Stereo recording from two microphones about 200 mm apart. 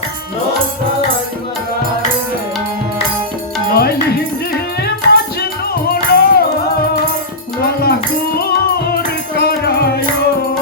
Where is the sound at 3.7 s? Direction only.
50° left (ahead or behind).